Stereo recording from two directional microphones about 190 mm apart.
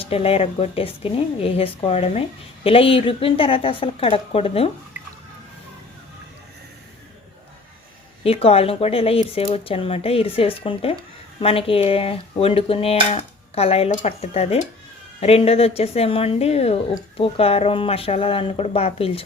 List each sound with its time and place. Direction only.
0.0 s dishes: 30° left (ahead or behind)
2.6 s a woman's voice: 30° left (ahead or behind)
8.2 s dishes: 30° left (ahead or behind)